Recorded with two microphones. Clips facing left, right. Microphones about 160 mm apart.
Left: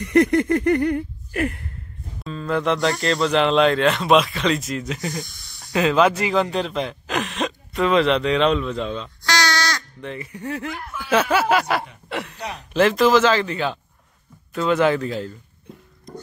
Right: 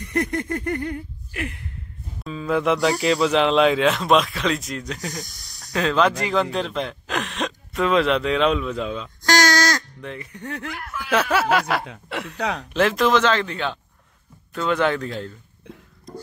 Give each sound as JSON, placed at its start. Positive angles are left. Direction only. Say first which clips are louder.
{"t": 0.0, "sound": "a sound", "louder": "left 8 dB", "side_deg": 85}
{"t": 1.3, "sound": "gasp", "louder": "left 7 dB", "side_deg": 45}
{"t": 2.2, "sound": "speech", "louder": "right 1 dB", "side_deg": -5}
{"t": 5.1, "sound": "speech", "louder": "left 3 dB", "side_deg": -40}
{"t": 5.7, "sound": "speech", "louder": "left 2 dB", "side_deg": 5}
{"t": 9.2, "sound": "a sound", "louder": "right 4 dB", "side_deg": -45}
{"t": 10.0, "sound": "speech", "louder": "left 3 dB", "side_deg": 5}
{"t": 10.7, "sound": "speech", "louder": "left 2 dB", "side_deg": 20}
{"t": 11.0, "sound": "speech", "louder": "left 2 dB", "side_deg": 0}